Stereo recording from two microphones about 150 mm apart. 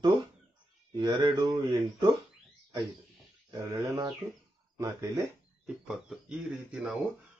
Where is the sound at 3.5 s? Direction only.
20° right (ahead or behind).